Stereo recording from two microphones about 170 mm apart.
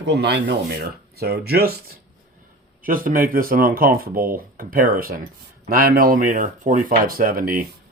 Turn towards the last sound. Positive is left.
turn(degrees=-55)  # may be behind; listen again after turning